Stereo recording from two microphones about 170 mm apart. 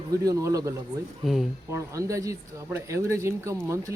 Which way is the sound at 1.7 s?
20° right (ahead or behind).